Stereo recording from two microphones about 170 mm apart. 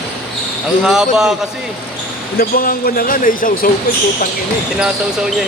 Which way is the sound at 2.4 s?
60° left (ahead or behind).